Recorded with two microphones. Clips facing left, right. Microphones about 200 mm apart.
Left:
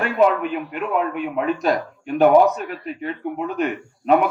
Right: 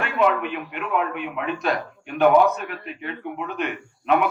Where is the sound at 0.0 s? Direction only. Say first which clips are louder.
Left 4 dB; 40° left (ahead or behind).